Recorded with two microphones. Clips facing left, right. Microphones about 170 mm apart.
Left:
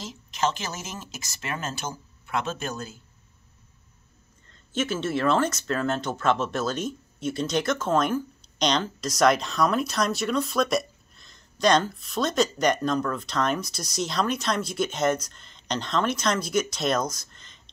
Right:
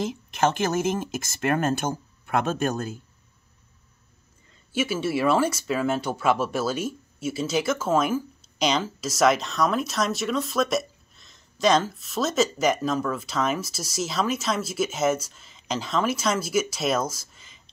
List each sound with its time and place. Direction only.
0.0 s speech: 55° right (ahead or behind)
4.5 s speech: 10° right (ahead or behind)